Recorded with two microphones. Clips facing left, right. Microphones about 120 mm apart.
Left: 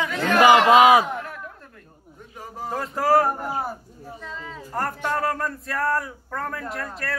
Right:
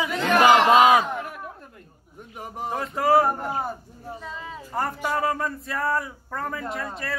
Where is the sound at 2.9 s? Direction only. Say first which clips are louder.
Even; centre (ahead or behind).